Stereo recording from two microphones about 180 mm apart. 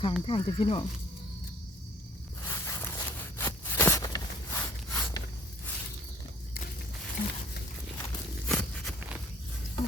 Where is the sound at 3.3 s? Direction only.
10° left (ahead or behind).